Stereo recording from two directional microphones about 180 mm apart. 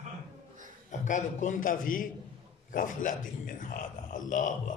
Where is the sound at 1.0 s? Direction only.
45° left (ahead or behind).